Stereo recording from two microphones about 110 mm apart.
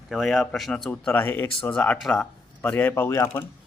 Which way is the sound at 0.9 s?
20° left (ahead or behind).